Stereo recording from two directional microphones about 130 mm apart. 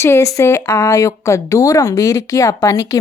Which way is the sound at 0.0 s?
20° left (ahead or behind).